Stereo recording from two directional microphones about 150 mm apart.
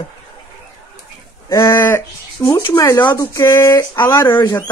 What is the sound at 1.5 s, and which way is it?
Speech, 20° left (ahead or behind).